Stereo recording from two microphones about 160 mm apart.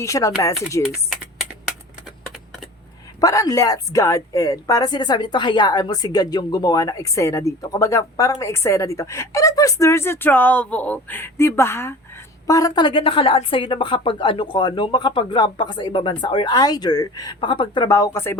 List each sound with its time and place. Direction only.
0.0 s speech: 20° left (ahead or behind)
3.2 s speech: 20° left (ahead or behind)